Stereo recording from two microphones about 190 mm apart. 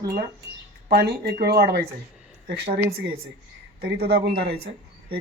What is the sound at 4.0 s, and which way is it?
Speech, 55° right (ahead or behind).